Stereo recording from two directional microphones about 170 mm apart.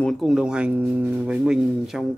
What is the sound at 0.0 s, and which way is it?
Speech, centre (ahead or behind).